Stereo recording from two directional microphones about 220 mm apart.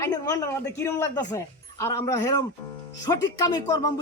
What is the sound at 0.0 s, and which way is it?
Speech, 15° left (ahead or behind).